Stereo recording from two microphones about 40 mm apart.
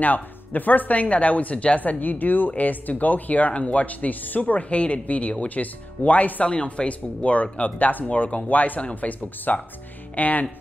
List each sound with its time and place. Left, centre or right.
0.0 s speech: left
1.8 s speech: left
6.4 s speech: left